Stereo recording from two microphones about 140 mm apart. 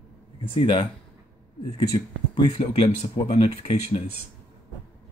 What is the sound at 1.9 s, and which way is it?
Speech, 30° left (ahead or behind).